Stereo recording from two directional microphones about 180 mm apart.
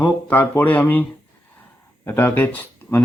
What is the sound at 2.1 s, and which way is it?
Speech, 10° left (ahead or behind).